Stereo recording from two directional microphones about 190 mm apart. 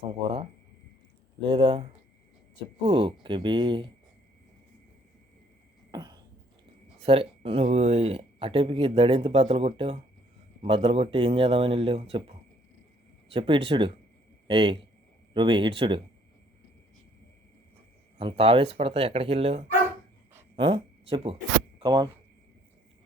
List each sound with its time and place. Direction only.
0.1 s speech: 30° right (ahead or behind)
5.9 s a sound: 20° right (ahead or behind)
7.0 s speech: 30° right (ahead or behind)
13.3 s speech: 30° right (ahead or behind)
18.2 s speech: 30° right (ahead or behind)